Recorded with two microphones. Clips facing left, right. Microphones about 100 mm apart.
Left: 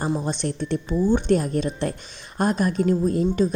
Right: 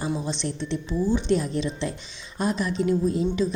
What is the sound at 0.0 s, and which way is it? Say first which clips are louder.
A woman's voice: left 3 dB; 50° left (ahead or behind).